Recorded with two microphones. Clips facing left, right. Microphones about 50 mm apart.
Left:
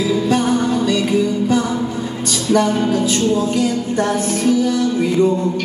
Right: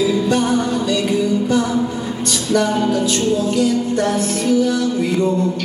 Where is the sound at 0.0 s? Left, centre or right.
Centre.